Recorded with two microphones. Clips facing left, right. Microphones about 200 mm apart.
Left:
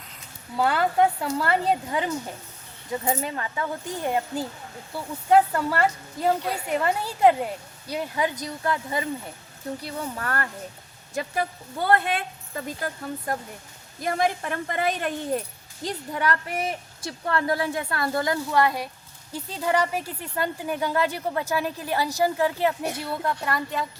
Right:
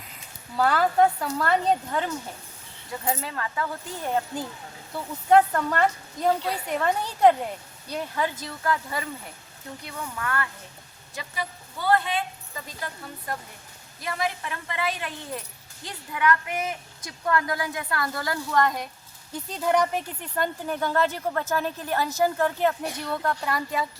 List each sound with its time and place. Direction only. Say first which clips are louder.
0.5 s a woman's voice: even; centre (ahead or behind)
2.9 s a woman's voice: left 3 dB; 20° left (ahead or behind)
5.3 s a woman's voice: even; 5° left (ahead or behind)
8.4 s a woman's voice: left 1 dB; 20° left (ahead or behind)
9.8 s speech: right 2 dB; 35° left (ahead or behind)
11.1 s a woman's voice: left 7 dB; 50° left (ahead or behind); by 18.3 s 25° left (ahead or behind)
18.5 s a woman's voice: right 1 dB; 5° left (ahead or behind)